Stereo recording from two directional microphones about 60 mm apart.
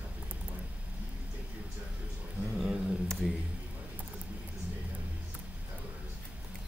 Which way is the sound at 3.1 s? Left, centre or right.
Centre.